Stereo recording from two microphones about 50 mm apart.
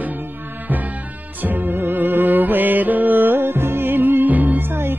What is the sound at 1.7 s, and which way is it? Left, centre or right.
Music, right.